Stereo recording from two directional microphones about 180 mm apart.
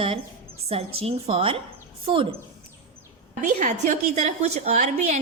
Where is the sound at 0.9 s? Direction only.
35° right (ahead or behind).